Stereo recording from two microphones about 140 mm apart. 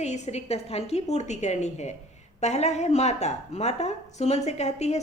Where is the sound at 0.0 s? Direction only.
55° left (ahead or behind).